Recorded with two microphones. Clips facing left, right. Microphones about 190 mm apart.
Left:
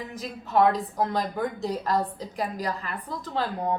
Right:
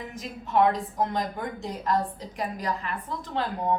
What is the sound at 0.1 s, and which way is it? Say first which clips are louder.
A woman's voice: left 1 dB; 35° left (ahead or behind).